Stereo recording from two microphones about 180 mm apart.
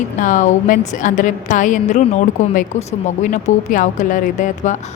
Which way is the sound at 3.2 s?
40° left (ahead or behind).